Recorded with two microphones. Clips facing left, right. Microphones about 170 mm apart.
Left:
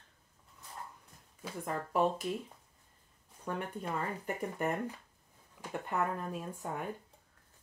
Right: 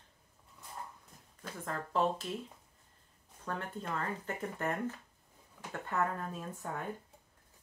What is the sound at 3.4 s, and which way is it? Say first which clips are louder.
Speech: left 2 dB; 15° left (ahead or behind).